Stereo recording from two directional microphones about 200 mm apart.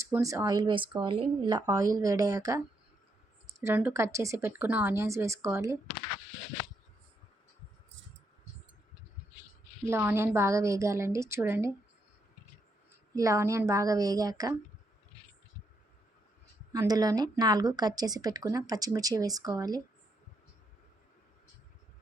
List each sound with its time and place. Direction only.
0.1 s a woman's voice: 15° right (ahead or behind)
3.6 s a woman's voice: 10° right (ahead or behind)
9.8 s a woman's voice: 10° right (ahead or behind)
13.1 s a woman's voice: 15° right (ahead or behind)
16.7 s speech: 20° right (ahead or behind)